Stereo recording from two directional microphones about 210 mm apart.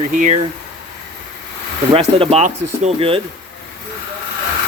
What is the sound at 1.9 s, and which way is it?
Speech, 25° right (ahead or behind).